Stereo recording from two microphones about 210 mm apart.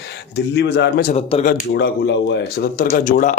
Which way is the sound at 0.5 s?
55° left (ahead or behind).